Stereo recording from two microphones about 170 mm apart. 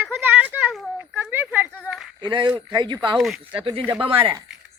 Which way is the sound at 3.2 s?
Centre (ahead or behind).